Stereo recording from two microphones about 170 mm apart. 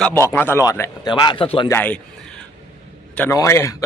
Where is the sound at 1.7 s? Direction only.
10° left (ahead or behind).